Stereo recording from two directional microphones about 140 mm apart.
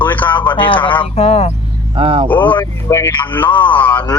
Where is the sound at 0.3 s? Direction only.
35° left (ahead or behind).